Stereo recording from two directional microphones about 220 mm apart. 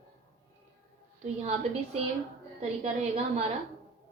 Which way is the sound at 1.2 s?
30° right (ahead or behind).